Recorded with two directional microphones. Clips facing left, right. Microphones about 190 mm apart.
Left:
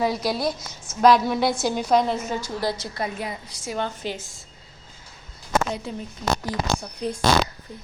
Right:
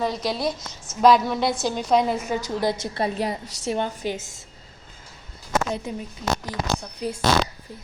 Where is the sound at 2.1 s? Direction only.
15° right (ahead or behind); by 3.3 s 35° right (ahead or behind).